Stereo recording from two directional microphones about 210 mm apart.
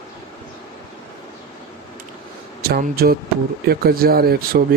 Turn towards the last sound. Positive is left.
turn(degrees=-45)  # may be behind; listen again after turning